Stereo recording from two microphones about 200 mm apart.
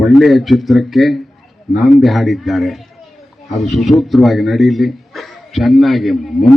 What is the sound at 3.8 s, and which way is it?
A man's voice, centre (ahead or behind).